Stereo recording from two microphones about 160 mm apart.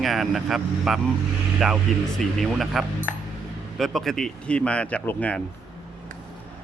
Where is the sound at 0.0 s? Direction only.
Centre (ahead or behind).